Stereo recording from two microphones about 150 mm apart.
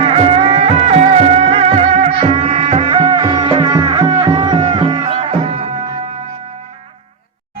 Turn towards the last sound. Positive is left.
turn(degrees=-45)  # may be behind; listen again after turning